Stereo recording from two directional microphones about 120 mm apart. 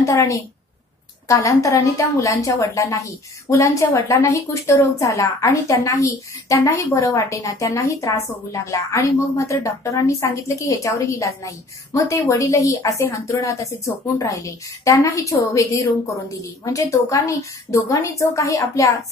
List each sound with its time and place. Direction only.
0.0 s a woman's voice: 25° left (ahead or behind)